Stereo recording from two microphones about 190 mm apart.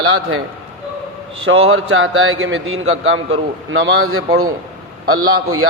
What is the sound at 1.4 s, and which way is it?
A man's voice, 90° right.